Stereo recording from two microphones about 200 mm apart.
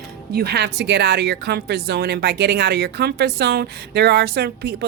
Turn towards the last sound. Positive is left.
turn(degrees=-50)  # may be behind; listen again after turning